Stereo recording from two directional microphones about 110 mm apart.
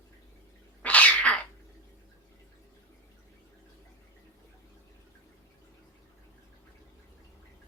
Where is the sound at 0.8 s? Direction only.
15° left (ahead or behind).